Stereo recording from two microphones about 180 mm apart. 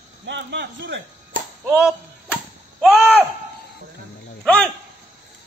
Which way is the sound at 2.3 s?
5° right (ahead or behind).